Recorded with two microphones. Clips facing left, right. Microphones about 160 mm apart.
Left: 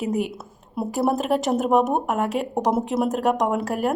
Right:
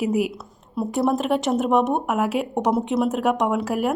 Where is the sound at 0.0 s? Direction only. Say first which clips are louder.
Right 3 dB; 5° right (ahead or behind).